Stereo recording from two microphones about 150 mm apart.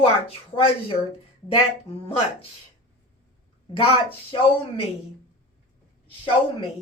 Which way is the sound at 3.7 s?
35° left (ahead or behind).